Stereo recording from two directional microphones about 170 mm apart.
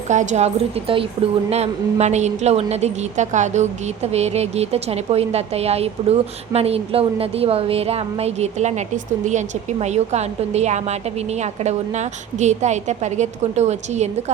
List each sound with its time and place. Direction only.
0.1 s a woman's voice: 45° right (ahead or behind)
9.8 s a woman's voice: 40° right (ahead or behind)